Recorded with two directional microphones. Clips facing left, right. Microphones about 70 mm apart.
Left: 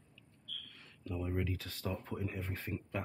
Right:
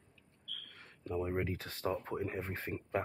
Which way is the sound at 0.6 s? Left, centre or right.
Right.